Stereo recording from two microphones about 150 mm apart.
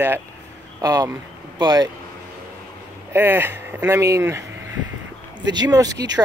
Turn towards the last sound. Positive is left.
turn(degrees=-25)  # may be behind; listen again after turning